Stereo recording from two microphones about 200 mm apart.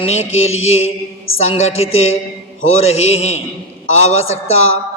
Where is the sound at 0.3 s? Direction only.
30° left (ahead or behind).